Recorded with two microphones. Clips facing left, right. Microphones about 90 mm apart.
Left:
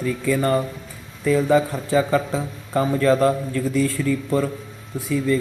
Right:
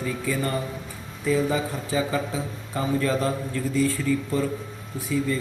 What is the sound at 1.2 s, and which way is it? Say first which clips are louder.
Speech: left 6 dB; 70° left (ahead or behind).